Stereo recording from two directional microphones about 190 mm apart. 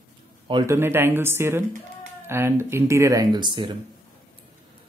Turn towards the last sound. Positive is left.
turn(degrees=-25)  # may be behind; listen again after turning